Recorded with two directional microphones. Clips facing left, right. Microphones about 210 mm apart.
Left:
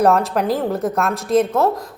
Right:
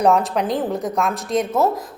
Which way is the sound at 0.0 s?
Centre (ahead or behind).